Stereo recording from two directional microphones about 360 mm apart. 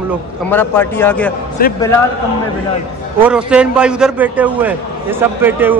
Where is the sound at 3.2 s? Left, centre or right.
Centre.